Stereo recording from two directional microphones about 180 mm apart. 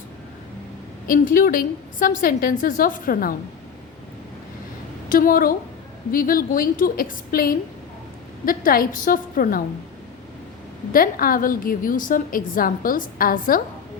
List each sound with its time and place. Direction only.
1.0 s a woman's voice: 50° left (ahead or behind)
5.0 s a woman's voice: 50° left (ahead or behind)
10.9 s a woman's voice: 50° left (ahead or behind)